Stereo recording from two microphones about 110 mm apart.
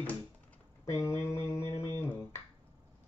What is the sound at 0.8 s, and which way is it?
Finger snapping, 25° left (ahead or behind).